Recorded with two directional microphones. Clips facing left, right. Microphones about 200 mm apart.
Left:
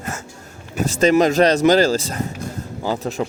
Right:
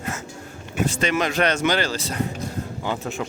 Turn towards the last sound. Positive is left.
turn(degrees=35)  # may be behind; listen again after turning